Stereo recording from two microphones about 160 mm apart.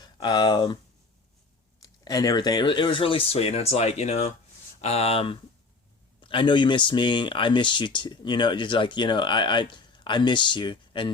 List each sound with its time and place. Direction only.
0.0 s speech: 25° left (ahead or behind)
1.8 s speech: 25° left (ahead or behind)